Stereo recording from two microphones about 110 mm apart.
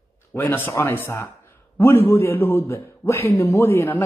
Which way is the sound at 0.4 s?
15° left (ahead or behind).